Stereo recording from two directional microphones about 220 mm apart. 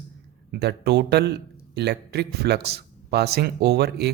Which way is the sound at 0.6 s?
50° right (ahead or behind).